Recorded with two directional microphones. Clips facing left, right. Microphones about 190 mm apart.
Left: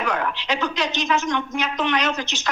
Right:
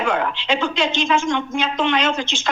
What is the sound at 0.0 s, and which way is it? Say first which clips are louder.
Speech: right 3 dB; 25° right (ahead or behind).